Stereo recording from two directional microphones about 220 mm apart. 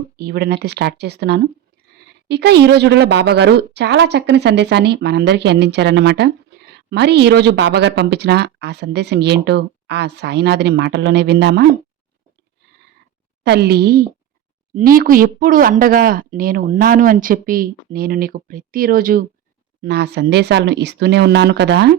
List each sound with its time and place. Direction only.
0.2 s a woman's voice: 45° right (ahead or behind)
13.4 s a woman's voice: 45° right (ahead or behind)